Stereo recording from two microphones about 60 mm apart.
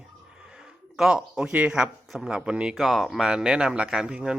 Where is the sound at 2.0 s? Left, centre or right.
Centre.